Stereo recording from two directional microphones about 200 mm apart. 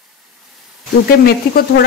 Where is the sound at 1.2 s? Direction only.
50° left (ahead or behind).